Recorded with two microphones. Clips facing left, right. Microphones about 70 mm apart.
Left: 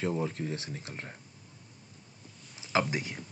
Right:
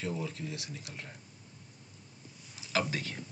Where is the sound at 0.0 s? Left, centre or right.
Left.